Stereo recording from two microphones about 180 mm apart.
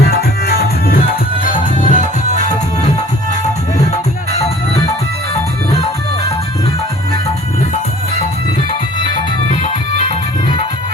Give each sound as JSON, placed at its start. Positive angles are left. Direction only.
{"t": 0.0, "sound": "music", "side_deg": 60}
{"t": 4.3, "sound": "music", "side_deg": 35}
{"t": 9.0, "sound": "music", "side_deg": 30}